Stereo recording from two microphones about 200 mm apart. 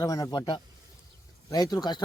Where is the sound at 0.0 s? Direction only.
20° left (ahead or behind).